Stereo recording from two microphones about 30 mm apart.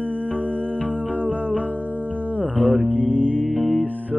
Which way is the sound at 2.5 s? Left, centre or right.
Right.